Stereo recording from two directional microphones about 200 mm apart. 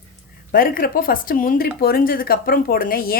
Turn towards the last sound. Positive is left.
turn(degrees=45)  # may be behind; listen again after turning